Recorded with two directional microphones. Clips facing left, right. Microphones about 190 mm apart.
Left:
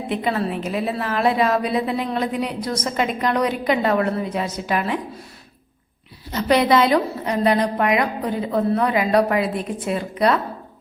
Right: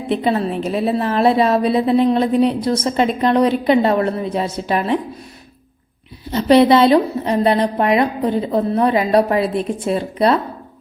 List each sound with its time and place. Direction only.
0.1 s a woman's voice: 30° right (ahead or behind)
6.3 s a woman's voice: 30° right (ahead or behind)